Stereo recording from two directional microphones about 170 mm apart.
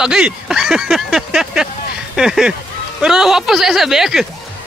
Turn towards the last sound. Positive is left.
turn(degrees=0)  # may be behind; listen again after turning